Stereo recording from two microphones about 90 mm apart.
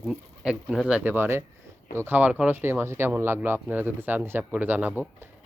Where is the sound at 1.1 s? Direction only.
25° right (ahead or behind).